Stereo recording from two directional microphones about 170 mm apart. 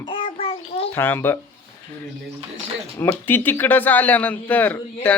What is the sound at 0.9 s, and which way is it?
Speech, 10° left (ahead or behind).